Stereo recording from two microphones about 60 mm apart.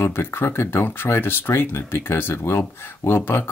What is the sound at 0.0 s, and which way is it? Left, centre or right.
Speech, left.